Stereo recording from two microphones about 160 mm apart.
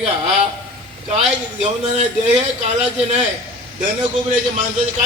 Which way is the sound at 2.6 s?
40° right (ahead or behind).